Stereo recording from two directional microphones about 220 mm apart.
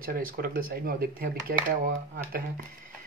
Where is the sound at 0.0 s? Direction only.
40° right (ahead or behind).